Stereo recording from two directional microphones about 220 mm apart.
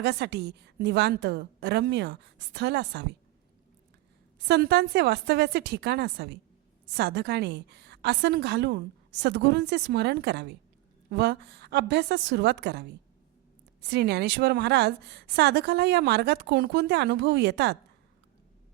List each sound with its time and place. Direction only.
0.0 s a woman's voice: 50° right (ahead or behind)
4.4 s a woman's voice: 50° right (ahead or behind)
13.8 s a woman's voice: 45° right (ahead or behind)